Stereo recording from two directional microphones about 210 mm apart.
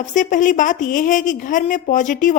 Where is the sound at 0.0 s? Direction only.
35° left (ahead or behind).